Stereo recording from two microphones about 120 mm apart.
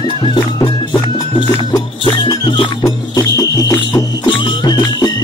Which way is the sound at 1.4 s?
40° left (ahead or behind).